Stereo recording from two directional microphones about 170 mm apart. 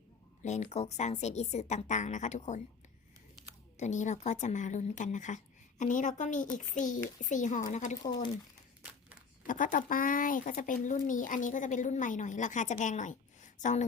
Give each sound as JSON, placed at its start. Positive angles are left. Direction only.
{"t": 0.4, "sound": "a woman's voice", "side_deg": 40}
{"t": 3.8, "sound": "speech", "side_deg": 45}
{"t": 9.5, "sound": "speech", "side_deg": 50}